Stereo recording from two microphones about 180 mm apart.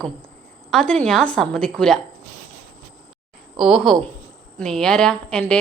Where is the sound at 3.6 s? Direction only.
Centre (ahead or behind).